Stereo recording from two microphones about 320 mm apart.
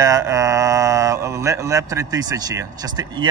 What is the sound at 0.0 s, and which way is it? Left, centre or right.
Speech, centre.